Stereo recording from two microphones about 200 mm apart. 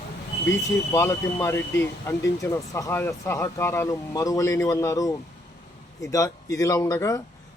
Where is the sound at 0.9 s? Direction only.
15° left (ahead or behind).